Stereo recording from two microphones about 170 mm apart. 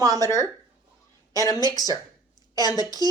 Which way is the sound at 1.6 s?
25° left (ahead or behind).